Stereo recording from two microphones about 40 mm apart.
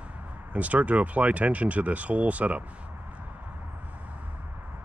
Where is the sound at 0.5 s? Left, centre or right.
Right.